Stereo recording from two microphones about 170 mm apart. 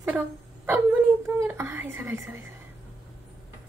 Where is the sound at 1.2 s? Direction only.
15° right (ahead or behind).